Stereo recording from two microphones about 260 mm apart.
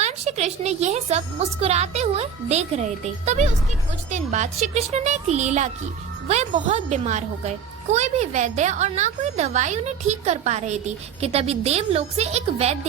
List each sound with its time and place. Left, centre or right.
0.0 s a child's voice: right